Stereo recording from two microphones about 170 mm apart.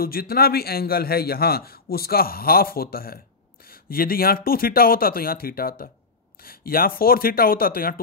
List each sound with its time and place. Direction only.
0.0 s a man's voice: 60° left (ahead or behind)